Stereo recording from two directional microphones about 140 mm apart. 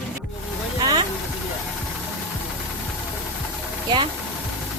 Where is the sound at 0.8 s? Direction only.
30° right (ahead or behind).